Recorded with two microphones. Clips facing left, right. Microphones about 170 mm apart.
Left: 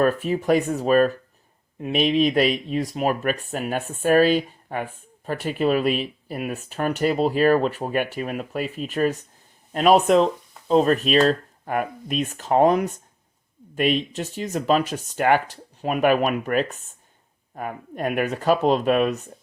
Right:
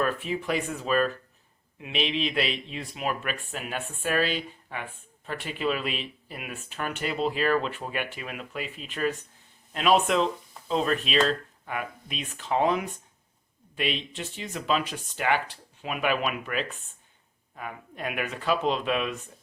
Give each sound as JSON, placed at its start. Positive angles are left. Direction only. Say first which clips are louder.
{"t": 0.0, "sound": "speech", "louder": "left 7 dB", "side_deg": 45}